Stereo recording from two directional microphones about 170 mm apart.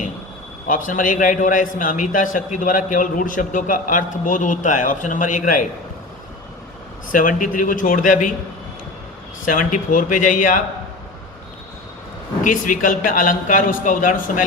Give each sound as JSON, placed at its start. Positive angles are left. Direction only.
{"t": 0.7, "sound": "a man's voice", "side_deg": 50}
{"t": 7.1, "sound": "a man's voice", "side_deg": 55}
{"t": 9.5, "sound": "a man's voice", "side_deg": 50}
{"t": 12.4, "sound": "a man's voice", "side_deg": 50}